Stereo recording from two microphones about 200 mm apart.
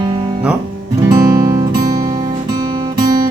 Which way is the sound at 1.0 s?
15° right (ahead or behind).